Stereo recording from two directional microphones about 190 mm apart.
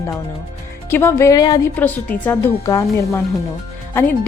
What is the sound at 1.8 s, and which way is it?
A woman's voice, 10° left (ahead or behind).